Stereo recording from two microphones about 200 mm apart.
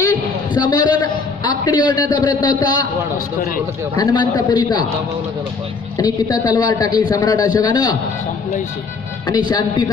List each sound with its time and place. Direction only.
0.0 s a sound: 20° left (ahead or behind)
2.6 s a man's voice: 20° left (ahead or behind)
3.9 s a man's voice: 20° left (ahead or behind)
5.9 s a man's voice: 20° left (ahead or behind)
9.3 s a man's voice: 20° left (ahead or behind)